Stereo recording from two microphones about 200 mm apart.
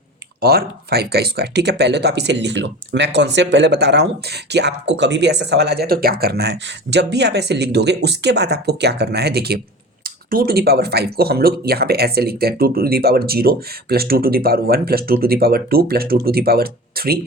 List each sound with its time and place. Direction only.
0.4 s speech: 50° right (ahead or behind)